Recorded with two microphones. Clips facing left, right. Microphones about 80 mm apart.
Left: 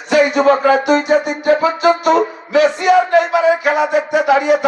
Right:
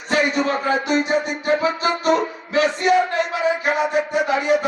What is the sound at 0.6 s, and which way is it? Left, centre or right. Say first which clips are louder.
Music: left 7 dB; left.